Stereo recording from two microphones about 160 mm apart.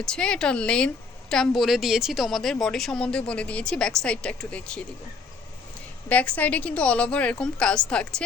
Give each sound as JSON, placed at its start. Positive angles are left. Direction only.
{"t": 0.0, "sound": "a woman's voice", "side_deg": 5}
{"t": 6.1, "sound": "a woman's voice", "side_deg": 10}